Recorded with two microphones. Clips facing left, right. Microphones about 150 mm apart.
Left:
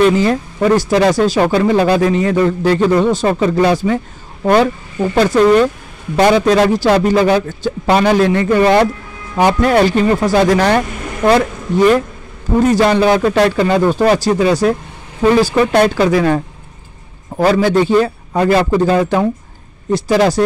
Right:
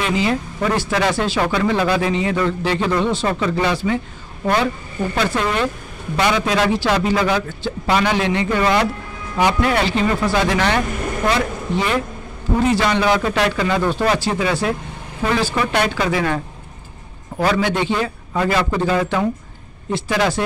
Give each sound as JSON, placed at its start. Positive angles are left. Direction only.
{"t": 0.0, "sound": "speech", "side_deg": 45}
{"t": 5.1, "sound": "speech", "side_deg": 40}
{"t": 17.5, "sound": "speech", "side_deg": 40}